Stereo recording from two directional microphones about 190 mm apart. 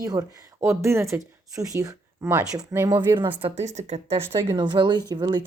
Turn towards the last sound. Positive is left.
turn(degrees=-25)  # may be behind; listen again after turning